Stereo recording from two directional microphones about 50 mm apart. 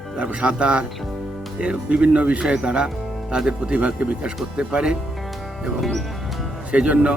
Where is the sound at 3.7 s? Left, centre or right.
Right.